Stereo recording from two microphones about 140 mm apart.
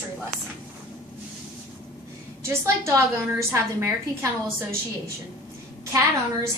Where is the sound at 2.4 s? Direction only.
20° right (ahead or behind).